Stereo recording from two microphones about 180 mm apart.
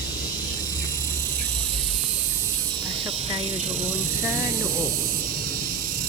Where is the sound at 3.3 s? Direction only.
35° right (ahead or behind).